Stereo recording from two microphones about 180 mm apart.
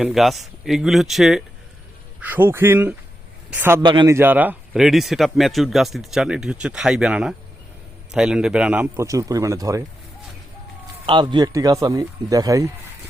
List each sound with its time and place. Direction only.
0.0 s a man's voice: centre (ahead or behind)
3.8 s a man's voice: 20° right (ahead or behind)
11.0 s speech: 25° right (ahead or behind)